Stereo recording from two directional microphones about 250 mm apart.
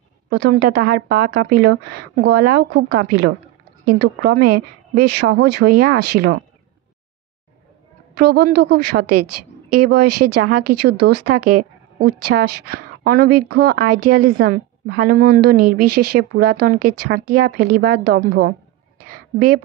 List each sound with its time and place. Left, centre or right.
0.3 s a woman's voice: right
4.4 s a woman's voice: right
5.2 s a woman's voice: right
8.2 s a woman's voice: right
9.0 s a woman's voice: right
10.8 s a woman's voice: right
13.8 s a woman's voice: right
14.1 s a woman's voice: right
15.8 s a woman's voice: right
16.2 s a woman's voice: right
19.0 s a sound: right